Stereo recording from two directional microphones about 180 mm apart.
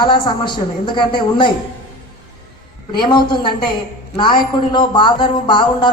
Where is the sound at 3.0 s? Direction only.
25° left (ahead or behind).